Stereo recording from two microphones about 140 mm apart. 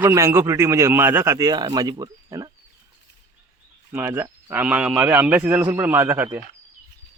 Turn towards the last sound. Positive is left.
turn(degrees=-15)  # may be behind; listen again after turning